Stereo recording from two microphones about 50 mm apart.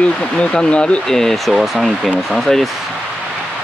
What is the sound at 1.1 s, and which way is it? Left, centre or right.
Speech, centre.